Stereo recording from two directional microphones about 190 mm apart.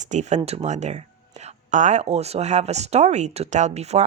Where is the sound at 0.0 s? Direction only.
40° right (ahead or behind).